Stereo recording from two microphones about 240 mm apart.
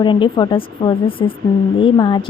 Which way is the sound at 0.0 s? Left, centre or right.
Centre.